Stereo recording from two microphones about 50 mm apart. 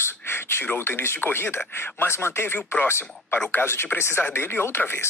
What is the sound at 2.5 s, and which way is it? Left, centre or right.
Speech, left.